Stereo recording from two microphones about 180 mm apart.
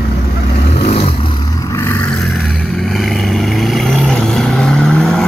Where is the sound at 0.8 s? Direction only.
35° left (ahead or behind).